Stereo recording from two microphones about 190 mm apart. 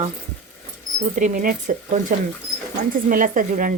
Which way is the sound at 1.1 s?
45° right (ahead or behind).